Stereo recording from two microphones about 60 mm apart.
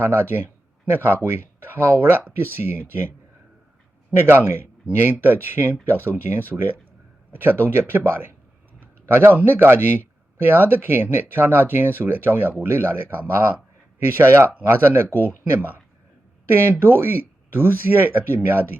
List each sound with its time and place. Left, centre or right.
0.0 s speech: right
4.1 s speech: right